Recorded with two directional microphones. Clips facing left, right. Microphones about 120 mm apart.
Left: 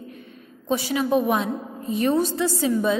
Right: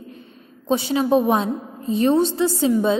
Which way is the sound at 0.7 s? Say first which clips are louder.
Right 4 dB; 30° right (ahead or behind).